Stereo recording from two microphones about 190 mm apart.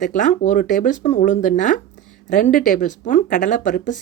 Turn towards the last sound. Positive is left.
turn(degrees=40)  # may be behind; listen again after turning